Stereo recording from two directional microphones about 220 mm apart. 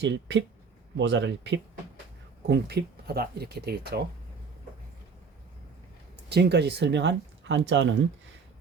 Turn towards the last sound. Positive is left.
turn(degrees=-55)  # may be behind; listen again after turning